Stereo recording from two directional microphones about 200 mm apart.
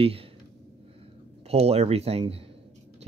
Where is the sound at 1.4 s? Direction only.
30° right (ahead or behind).